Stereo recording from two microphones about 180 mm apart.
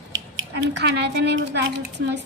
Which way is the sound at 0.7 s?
70° right (ahead or behind).